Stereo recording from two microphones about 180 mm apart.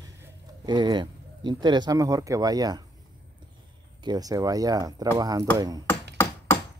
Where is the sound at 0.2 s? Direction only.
25° right (ahead or behind).